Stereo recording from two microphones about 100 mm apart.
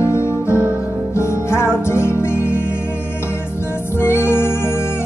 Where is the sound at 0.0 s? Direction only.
30° left (ahead or behind).